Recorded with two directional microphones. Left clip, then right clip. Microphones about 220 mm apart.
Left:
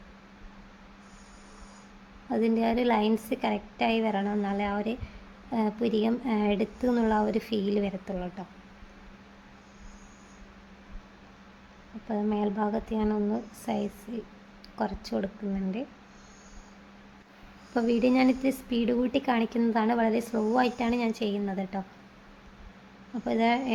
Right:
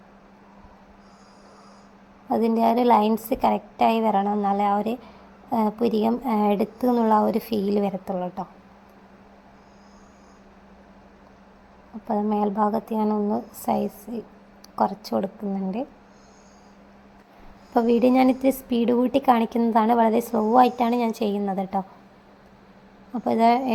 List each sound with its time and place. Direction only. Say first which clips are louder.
2.3 s a woman's voice: right 6 dB; 15° right (ahead or behind)
12.0 s a woman's voice: right 6 dB; 15° right (ahead or behind)
17.7 s a woman's voice: right 6 dB; 15° right (ahead or behind)
23.2 s a woman's voice: right 7 dB; 20° right (ahead or behind)